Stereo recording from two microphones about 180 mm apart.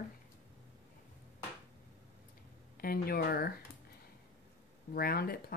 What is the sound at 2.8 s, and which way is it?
Speech, 55° left (ahead or behind).